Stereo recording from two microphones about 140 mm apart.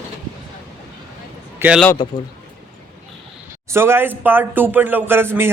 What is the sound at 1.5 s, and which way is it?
Speech, 10° right (ahead or behind).